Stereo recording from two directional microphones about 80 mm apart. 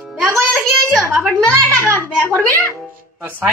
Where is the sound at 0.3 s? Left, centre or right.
Right.